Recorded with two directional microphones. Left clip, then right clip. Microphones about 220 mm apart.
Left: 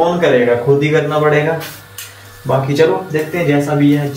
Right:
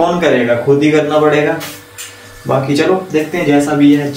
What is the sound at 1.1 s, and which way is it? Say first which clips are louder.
Speech: right 3 dB; 10° right (ahead or behind).